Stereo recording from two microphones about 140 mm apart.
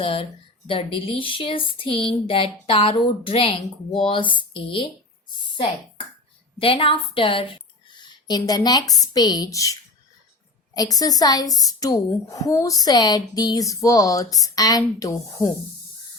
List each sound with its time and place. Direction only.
0.0 s speech: 40° left (ahead or behind)
6.6 s speech: 40° left (ahead or behind); by 9.7 s 25° left (ahead or behind)
10.8 s speech: 25° left (ahead or behind)